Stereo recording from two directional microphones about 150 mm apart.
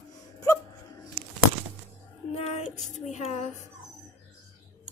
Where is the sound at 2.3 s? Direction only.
45° left (ahead or behind).